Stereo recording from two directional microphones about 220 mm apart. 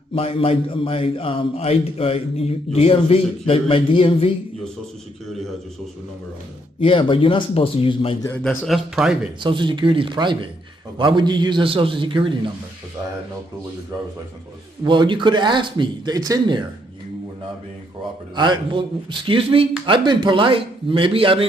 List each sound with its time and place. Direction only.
0.1 s a man's voice: 25° left (ahead or behind)
6.7 s a man's voice: 25° left (ahead or behind)
8.2 s a man's voice: 15° left (ahead or behind)
8.6 s speech: centre (ahead or behind)
9.4 s speech: 20° right (ahead or behind)
14.8 s speech: 20° right (ahead or behind)
18.3 s speech: 20° right (ahead or behind)